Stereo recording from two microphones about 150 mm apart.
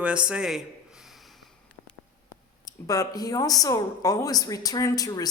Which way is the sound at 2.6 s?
25° left (ahead or behind).